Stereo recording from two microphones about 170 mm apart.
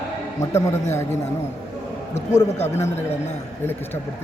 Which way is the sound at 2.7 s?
15° left (ahead or behind).